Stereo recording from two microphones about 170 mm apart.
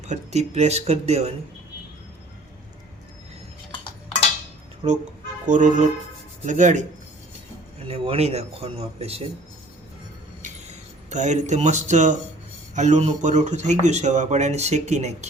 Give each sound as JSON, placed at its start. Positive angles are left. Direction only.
{"t": 0.0, "sound": "speech", "side_deg": -40}
{"t": 4.8, "sound": "a man's voice", "side_deg": -40}
{"t": 7.9, "sound": "speech", "side_deg": -35}
{"t": 10.4, "sound": "a sound", "side_deg": -45}
{"t": 12.7, "sound": "a man's voice", "side_deg": -45}